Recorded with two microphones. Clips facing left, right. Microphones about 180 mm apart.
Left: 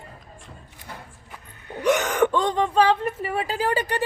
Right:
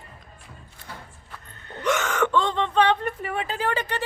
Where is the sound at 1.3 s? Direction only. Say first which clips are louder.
Left 4 dB; 10° left (ahead or behind).